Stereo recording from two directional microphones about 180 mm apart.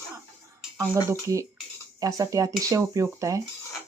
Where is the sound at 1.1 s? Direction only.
15° right (ahead or behind).